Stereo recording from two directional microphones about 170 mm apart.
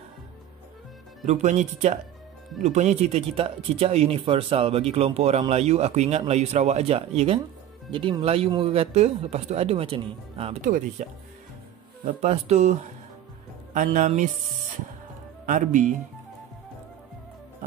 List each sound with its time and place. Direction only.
1.2 s speech: 45° right (ahead or behind)
10.6 s speech: 50° right (ahead or behind)
12.0 s speech: 35° right (ahead or behind)
13.7 s speech: 45° right (ahead or behind)
15.4 s speech: 50° right (ahead or behind)